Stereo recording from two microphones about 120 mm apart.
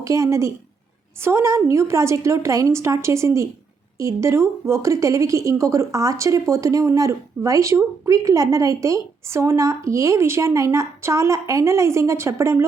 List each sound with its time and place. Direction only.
0.0 s speech: 25° right (ahead or behind)